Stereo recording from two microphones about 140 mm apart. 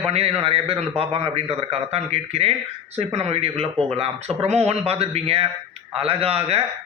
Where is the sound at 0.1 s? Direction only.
45° right (ahead or behind).